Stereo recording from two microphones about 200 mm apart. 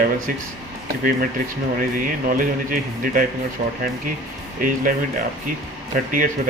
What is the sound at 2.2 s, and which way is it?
Speech, 45° right (ahead or behind).